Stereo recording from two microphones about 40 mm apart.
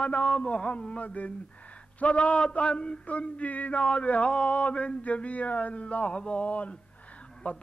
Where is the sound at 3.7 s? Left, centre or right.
Left.